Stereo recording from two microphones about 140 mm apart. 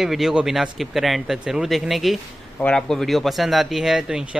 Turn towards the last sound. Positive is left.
turn(degrees=-5)  # may be behind; listen again after turning